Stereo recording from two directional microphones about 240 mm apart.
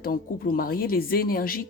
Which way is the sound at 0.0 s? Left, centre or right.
Left.